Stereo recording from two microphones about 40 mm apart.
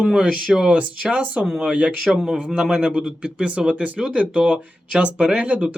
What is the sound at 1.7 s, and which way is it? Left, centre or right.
Speech, right.